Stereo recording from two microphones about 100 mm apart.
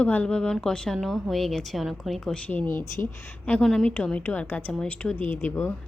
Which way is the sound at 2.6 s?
25° left (ahead or behind).